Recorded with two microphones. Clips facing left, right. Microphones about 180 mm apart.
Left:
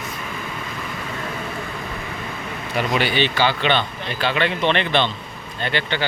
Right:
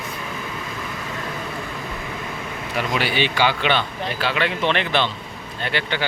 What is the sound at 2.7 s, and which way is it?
Speech, 5° right (ahead or behind).